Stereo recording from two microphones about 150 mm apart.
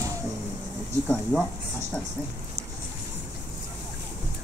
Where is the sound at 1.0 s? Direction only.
5° left (ahead or behind).